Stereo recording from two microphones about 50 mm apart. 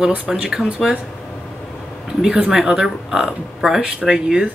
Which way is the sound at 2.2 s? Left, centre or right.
Centre.